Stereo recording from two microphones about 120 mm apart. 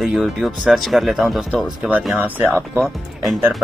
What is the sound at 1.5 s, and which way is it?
Speech, 10° right (ahead or behind).